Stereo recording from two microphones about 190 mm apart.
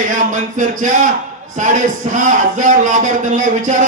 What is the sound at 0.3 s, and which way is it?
A man's voice, 40° right (ahead or behind).